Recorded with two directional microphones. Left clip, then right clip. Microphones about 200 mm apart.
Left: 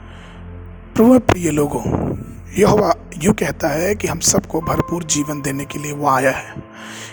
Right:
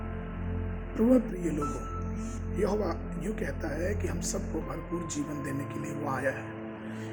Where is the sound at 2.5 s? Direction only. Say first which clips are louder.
Left 17 dB; 55° left (ahead or behind).